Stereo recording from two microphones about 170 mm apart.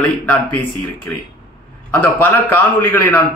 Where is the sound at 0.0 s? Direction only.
10° left (ahead or behind).